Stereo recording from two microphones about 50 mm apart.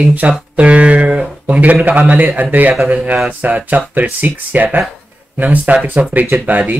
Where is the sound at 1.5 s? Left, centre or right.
Right.